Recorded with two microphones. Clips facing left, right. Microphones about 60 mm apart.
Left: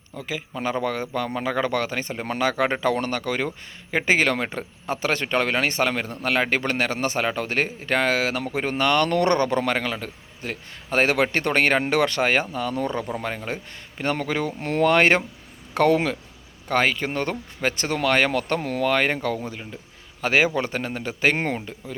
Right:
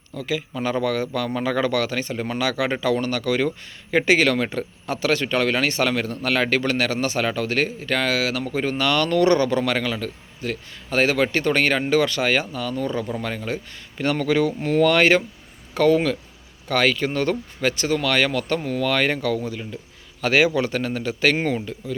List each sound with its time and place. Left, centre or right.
0.1 s a man's voice: left
2.2 s speech: left
13.2 s a man's voice: left
14.6 s speech: left
15.7 s speech: left
16.6 s speech: left
18.8 s a man's voice: left
21.3 s speech: left
21.6 s a man's voice: left